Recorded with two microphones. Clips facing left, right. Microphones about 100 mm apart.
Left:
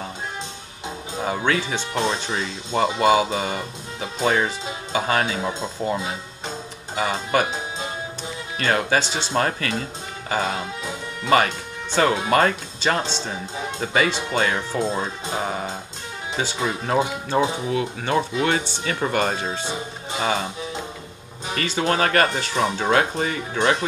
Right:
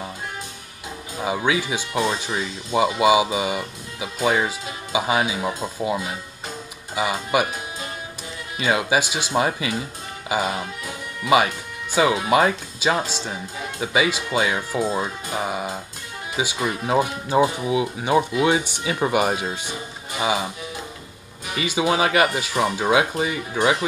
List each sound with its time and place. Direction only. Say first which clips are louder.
1.2 s speech: right 1 dB; 10° right (ahead or behind)
7.0 s speech: even; 10° right (ahead or behind)
8.5 s speech: even; 10° right (ahead or behind)
17.6 s speech: right 2 dB; 10° right (ahead or behind)
19.6 s speech: left 3 dB; 25° left (ahead or behind)
20.2 s speech: right 1 dB; 10° right (ahead or behind)
21.5 s speech: right 1 dB; 10° right (ahead or behind)